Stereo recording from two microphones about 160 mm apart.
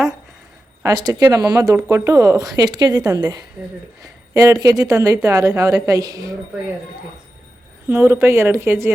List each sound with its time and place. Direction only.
0.8 s speech: 25° right (ahead or behind)
7.9 s speech: 15° right (ahead or behind)